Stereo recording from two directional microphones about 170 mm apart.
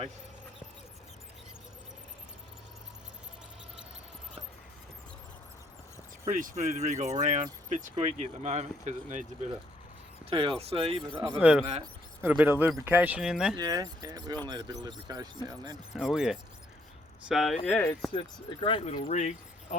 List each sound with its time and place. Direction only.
6.6 s speech: 45° right (ahead or behind)
10.2 s speech: 30° right (ahead or behind)
11.3 s speech: 5° right (ahead or behind)
13.6 s speech: 25° right (ahead or behind)
16.0 s speech: 5° right (ahead or behind)
17.7 s speech: 10° left (ahead or behind)
18.1 s speech: 30° left (ahead or behind)